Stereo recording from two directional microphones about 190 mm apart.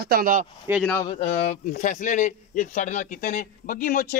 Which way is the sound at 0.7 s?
10° right (ahead or behind).